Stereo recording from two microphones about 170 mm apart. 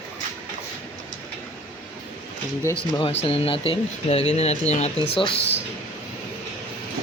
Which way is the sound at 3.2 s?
35° left (ahead or behind).